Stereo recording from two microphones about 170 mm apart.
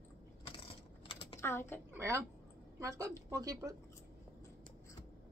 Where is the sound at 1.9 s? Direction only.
20° right (ahead or behind).